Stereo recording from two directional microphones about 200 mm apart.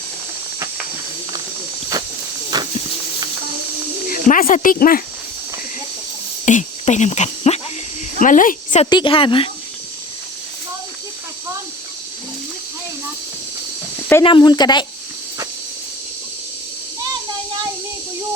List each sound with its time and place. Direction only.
1.9 s a sound: 15° right (ahead or behind)
4.1 s speech: 45° left (ahead or behind)
6.4 s speech: 35° left (ahead or behind)
8.9 s a woman's voice: 25° left (ahead or behind)
14.3 s a woman's voice: 25° left (ahead or behind)